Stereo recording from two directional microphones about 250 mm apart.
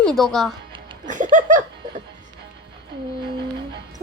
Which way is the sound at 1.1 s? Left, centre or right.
Right.